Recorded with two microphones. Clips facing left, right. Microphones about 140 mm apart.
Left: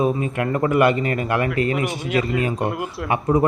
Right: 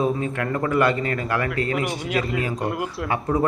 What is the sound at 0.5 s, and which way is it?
Speech, 20° left (ahead or behind).